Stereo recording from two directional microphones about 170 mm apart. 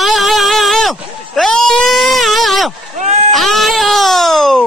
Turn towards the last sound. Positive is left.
turn(degrees=0)  # may be behind; listen again after turning